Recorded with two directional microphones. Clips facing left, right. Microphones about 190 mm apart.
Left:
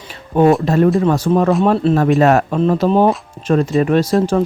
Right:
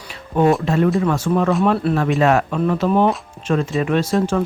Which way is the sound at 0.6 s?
40° left (ahead or behind).